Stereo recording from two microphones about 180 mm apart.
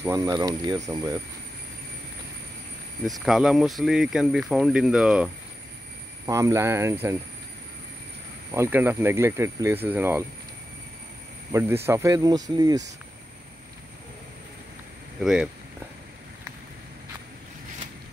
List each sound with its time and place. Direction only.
0.0 s speech: 15° right (ahead or behind)
3.1 s speech: 5° right (ahead or behind)
6.2 s speech: 15° right (ahead or behind)
8.5 s speech: 10° right (ahead or behind)
11.5 s speech: 15° right (ahead or behind)
15.2 s speech: 5° right (ahead or behind)